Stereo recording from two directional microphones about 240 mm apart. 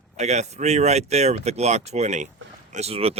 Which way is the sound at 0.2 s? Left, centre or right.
Right.